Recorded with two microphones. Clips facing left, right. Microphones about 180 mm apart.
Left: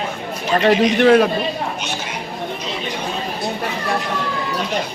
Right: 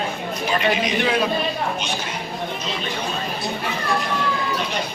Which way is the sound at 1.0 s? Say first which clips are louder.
Left 13 dB; 55° left (ahead or behind).